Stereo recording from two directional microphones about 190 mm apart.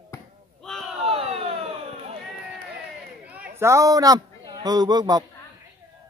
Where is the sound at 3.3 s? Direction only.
10° right (ahead or behind).